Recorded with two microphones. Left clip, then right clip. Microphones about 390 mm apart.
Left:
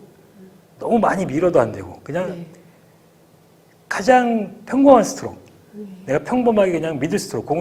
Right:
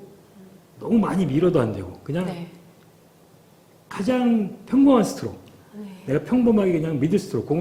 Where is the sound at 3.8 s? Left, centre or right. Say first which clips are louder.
Left 9 dB; left.